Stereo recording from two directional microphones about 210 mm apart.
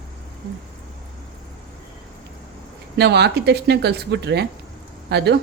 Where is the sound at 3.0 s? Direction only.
50° right (ahead or behind).